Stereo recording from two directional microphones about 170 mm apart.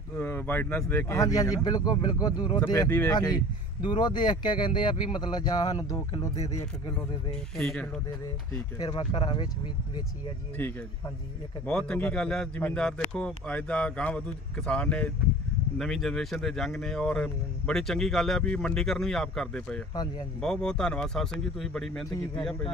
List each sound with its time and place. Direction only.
0.2 s speech: 10° left (ahead or behind)
7.5 s speech: 5° left (ahead or behind)
8.7 s speech: 25° left (ahead or behind)
10.6 s a man's voice: 10° left (ahead or behind)